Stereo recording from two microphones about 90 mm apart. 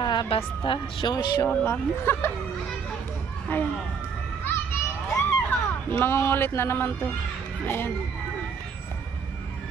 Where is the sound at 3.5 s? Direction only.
20° left (ahead or behind).